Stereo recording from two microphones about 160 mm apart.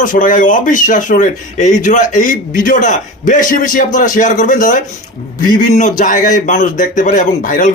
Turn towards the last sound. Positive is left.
turn(degrees=55)  # may be behind; listen again after turning